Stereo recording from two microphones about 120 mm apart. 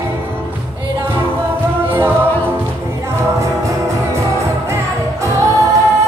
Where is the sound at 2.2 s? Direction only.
15° left (ahead or behind).